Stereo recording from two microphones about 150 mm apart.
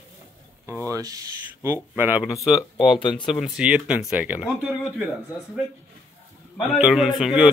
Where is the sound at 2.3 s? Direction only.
Centre (ahead or behind).